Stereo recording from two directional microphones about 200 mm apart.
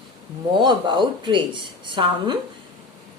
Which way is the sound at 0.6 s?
25° right (ahead or behind).